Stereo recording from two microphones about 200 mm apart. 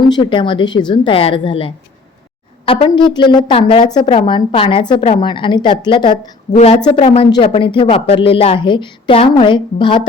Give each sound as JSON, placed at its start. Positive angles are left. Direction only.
{"t": 0.1, "sound": "a woman's voice", "side_deg": 25}